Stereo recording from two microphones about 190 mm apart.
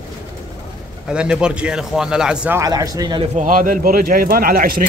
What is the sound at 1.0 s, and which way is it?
Speech, 5° right (ahead or behind).